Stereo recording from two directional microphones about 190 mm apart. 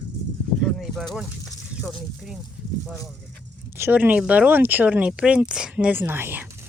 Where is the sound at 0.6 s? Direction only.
Centre (ahead or behind).